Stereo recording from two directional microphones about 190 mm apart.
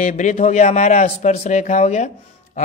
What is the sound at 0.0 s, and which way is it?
A man's voice, 40° left (ahead or behind).